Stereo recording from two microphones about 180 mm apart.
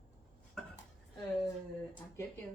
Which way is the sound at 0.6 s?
5° left (ahead or behind).